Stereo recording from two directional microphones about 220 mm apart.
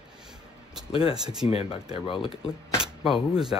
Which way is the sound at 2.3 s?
5° right (ahead or behind).